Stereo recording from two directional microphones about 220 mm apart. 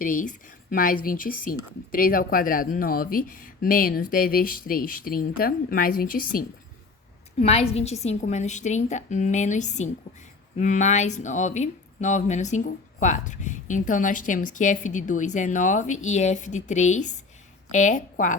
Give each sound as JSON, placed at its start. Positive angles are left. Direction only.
{"t": 0.0, "sound": "speech", "side_deg": 40}
{"t": 7.3, "sound": "a woman's voice", "side_deg": 30}